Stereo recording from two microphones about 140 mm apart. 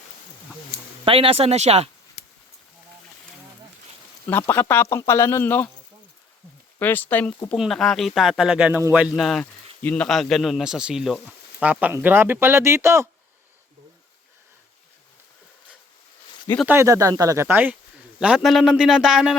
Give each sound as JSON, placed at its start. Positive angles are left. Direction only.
{"t": 1.0, "sound": "speech", "side_deg": -40}
{"t": 4.3, "sound": "speech", "side_deg": 15}
{"t": 6.7, "sound": "speech", "side_deg": 15}
{"t": 7.5, "sound": "speech", "side_deg": 0}
{"t": 16.6, "sound": "speech", "side_deg": -20}